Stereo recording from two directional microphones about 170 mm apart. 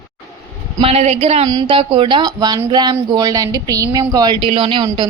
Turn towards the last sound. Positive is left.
turn(degrees=-30)  # may be behind; listen again after turning